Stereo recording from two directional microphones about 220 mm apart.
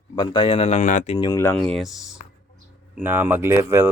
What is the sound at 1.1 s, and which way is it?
Speech, 15° left (ahead or behind).